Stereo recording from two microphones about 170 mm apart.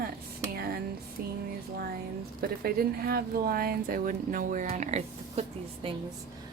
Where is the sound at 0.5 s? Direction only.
65° right (ahead or behind).